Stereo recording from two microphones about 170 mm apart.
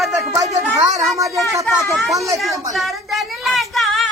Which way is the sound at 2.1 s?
20° right (ahead or behind).